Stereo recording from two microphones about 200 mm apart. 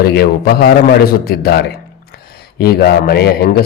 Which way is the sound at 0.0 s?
50° left (ahead or behind).